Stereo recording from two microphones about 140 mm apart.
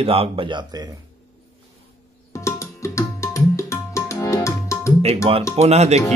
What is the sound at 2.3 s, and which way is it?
Tabla, 20° left (ahead or behind).